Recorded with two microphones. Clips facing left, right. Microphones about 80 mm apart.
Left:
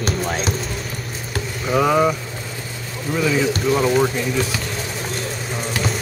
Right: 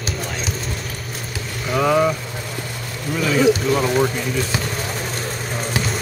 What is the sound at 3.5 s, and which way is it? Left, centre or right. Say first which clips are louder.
Speech: right 1 dB; centre.